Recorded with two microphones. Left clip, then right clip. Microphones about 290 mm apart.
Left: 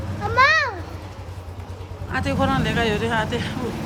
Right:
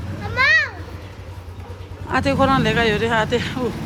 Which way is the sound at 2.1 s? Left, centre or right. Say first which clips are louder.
Right 5 dB; centre.